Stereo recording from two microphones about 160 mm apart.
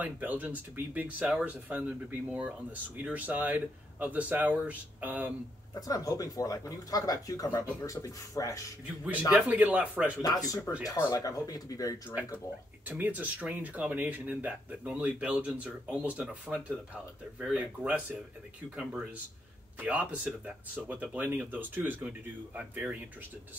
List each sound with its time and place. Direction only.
0.0 s speech: 10° right (ahead or behind)
5.8 s speech: 20° left (ahead or behind)
9.3 s speech: 5° right (ahead or behind)
10.2 s speech: 20° left (ahead or behind)
12.8 s speech: 10° right (ahead or behind)
19.8 s speech: 10° right (ahead or behind)